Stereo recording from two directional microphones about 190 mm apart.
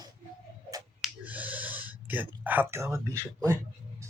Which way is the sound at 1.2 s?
10° right (ahead or behind).